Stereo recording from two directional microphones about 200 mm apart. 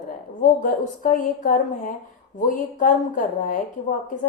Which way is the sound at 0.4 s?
40° left (ahead or behind).